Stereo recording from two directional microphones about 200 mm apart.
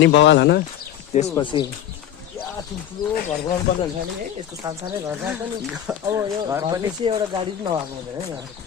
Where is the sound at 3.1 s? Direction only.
50° left (ahead or behind).